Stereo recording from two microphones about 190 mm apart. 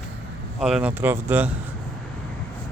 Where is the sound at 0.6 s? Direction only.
5° right (ahead or behind).